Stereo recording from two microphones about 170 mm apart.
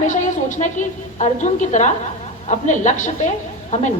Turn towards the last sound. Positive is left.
turn(degrees=45)  # may be behind; listen again after turning